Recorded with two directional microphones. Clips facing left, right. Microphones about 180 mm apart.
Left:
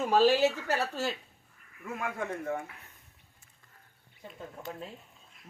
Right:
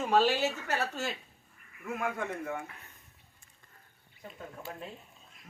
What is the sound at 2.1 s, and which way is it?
Speech, 35° left (ahead or behind).